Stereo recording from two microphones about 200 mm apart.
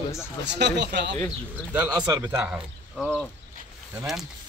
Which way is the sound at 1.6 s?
5° right (ahead or behind).